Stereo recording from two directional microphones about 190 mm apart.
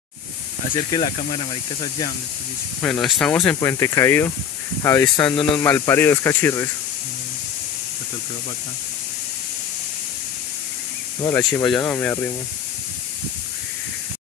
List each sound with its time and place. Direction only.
0.9 s speech: 25° left (ahead or behind)
2.8 s speech: 5° left (ahead or behind)
11.2 s speech: 10° left (ahead or behind)